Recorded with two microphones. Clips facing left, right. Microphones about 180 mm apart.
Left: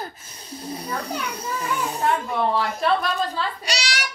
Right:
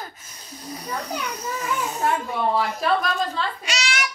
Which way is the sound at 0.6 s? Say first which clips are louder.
Left 1 dB; 30° left (ahead or behind).